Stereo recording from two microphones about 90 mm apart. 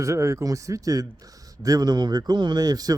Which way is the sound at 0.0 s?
35° right (ahead or behind).